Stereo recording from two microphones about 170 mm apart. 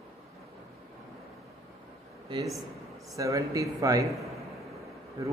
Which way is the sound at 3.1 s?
20° right (ahead or behind).